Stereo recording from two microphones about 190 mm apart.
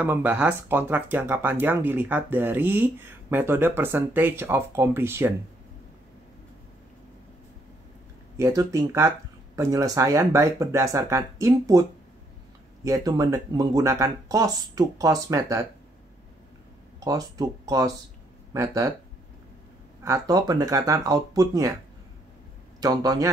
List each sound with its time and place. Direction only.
0.0 s speech: 10° right (ahead or behind)
8.4 s speech: 15° right (ahead or behind)
12.8 s speech: 15° right (ahead or behind)
17.0 s speech: 20° right (ahead or behind)
20.0 s speech: 15° right (ahead or behind)
22.8 s a man's voice: 20° right (ahead or behind)